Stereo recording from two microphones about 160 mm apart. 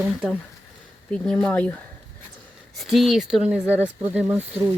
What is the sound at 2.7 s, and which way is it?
Speech, centre (ahead or behind).